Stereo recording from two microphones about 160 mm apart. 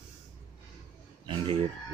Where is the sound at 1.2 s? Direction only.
35° right (ahead or behind).